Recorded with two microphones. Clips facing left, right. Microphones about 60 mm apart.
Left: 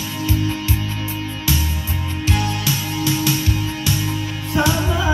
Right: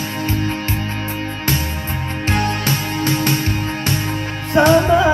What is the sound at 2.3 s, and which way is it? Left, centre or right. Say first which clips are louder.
Music: right 3 dB; right.